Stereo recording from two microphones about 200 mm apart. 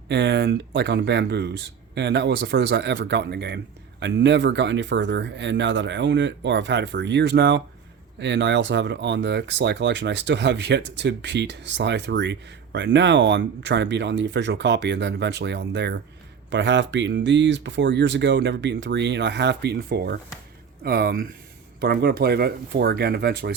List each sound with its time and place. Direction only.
0.1 s speech: 60° right (ahead or behind)